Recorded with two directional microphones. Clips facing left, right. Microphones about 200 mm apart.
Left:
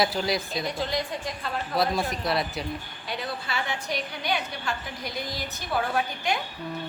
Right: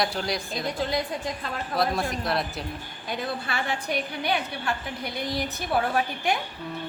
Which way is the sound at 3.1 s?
55° right (ahead or behind).